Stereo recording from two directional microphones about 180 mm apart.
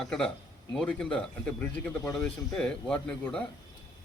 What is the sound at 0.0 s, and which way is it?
Speech, centre (ahead or behind).